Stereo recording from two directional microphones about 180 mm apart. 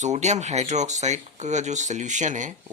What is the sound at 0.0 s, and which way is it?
Speech, 40° right (ahead or behind).